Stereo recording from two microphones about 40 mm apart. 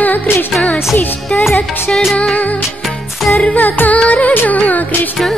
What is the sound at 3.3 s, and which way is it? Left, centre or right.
Music, left.